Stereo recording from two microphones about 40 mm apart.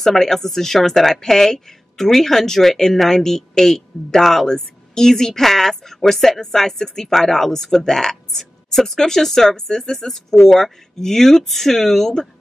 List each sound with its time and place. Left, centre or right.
0.0 s a woman's voice: centre